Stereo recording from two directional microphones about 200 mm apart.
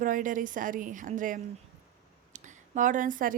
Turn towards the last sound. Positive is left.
turn(degrees=-40)  # may be behind; listen again after turning